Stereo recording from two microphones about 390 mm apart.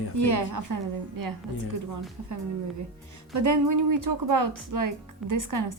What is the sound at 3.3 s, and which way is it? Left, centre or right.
A woman's voice, right.